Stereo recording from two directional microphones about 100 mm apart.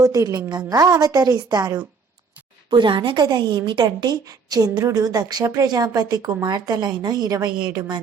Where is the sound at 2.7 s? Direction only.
55° right (ahead or behind).